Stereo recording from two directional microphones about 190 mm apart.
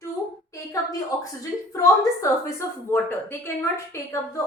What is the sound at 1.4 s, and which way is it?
A woman's voice, 15° left (ahead or behind).